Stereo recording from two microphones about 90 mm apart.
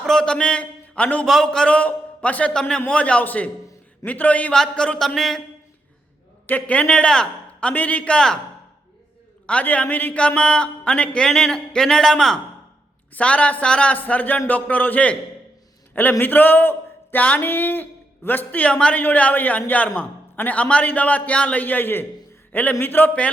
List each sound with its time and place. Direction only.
0.0 s a man's voice: 5° left (ahead or behind)
1.3 s a man's voice: 5° left (ahead or behind)
6.5 s a man's voice: 15° left (ahead or behind)
9.5 s a man's voice: 15° left (ahead or behind)
16.2 s a man's voice: 20° left (ahead or behind)